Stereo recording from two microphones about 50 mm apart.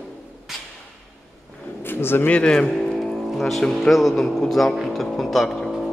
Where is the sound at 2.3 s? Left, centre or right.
Left.